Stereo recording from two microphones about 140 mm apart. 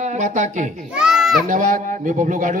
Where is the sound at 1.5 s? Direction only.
70° right (ahead or behind).